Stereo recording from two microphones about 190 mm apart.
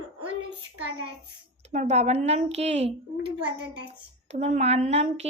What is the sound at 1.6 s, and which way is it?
A woman's voice, 35° right (ahead or behind).